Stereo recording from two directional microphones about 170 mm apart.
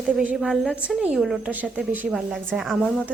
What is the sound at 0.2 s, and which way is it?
A woman's voice, 5° right (ahead or behind).